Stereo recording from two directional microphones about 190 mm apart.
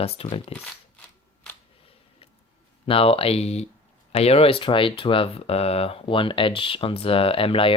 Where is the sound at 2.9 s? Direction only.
30° left (ahead or behind).